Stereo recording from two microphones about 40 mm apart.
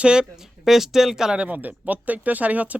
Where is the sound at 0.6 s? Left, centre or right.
Centre.